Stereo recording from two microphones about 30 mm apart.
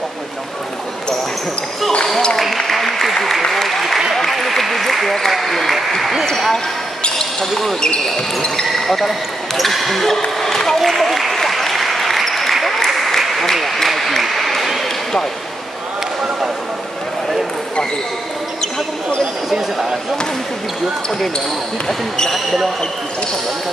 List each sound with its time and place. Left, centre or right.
2.5 s applause: centre
5.3 s speech: centre
7.2 s basketball bounce: left
7.9 s speech: left
8.7 s speech: centre
10.8 s speech: centre
11.3 s applause: centre
19.5 s speech: centre
22.3 s speech: centre